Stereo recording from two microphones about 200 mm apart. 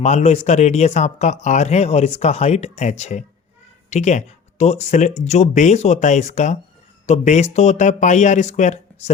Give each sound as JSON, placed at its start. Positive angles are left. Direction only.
{"t": 0.0, "sound": "speech", "side_deg": 35}